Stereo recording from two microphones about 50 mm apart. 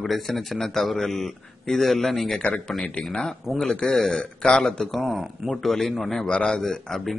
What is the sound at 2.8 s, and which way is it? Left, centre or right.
Speech, left.